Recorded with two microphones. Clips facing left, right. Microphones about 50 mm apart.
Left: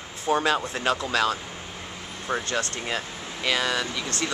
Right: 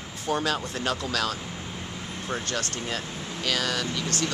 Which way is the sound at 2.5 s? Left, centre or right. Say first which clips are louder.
Left 3 dB; left.